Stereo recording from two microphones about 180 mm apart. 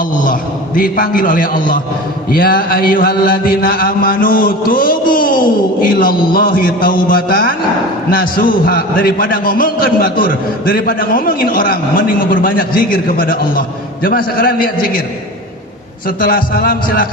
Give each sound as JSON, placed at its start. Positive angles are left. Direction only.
{"t": 0.8, "sound": "a man's voice", "side_deg": 55}
{"t": 16.0, "sound": "a man's voice", "side_deg": 55}